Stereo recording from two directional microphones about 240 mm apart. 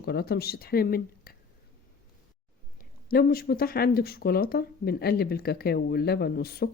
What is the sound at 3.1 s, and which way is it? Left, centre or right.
Speech, left.